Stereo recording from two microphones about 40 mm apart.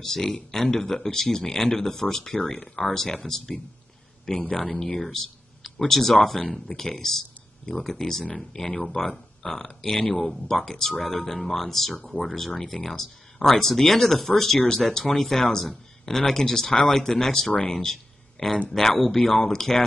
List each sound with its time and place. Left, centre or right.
0.0 s speech: centre